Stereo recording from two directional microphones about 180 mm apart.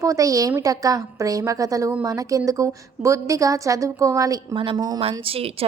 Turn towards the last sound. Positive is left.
turn(degrees=-30)  # may be behind; listen again after turning